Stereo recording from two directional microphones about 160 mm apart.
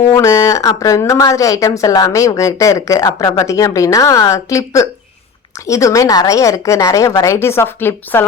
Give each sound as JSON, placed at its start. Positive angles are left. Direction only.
{"t": 0.1, "sound": "a woman's voice", "side_deg": 20}